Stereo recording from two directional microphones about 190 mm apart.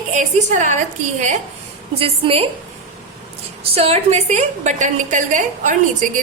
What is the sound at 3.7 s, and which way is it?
A woman's voice, 35° right (ahead or behind).